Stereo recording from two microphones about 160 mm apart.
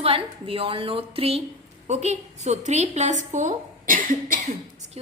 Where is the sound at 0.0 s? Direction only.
35° right (ahead or behind); by 4.4 s 60° right (ahead or behind).